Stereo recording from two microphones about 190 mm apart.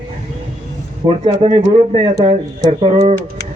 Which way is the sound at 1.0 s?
35° right (ahead or behind).